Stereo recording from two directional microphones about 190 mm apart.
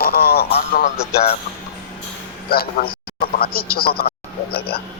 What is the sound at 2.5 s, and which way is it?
A man's voice, 55° left (ahead or behind).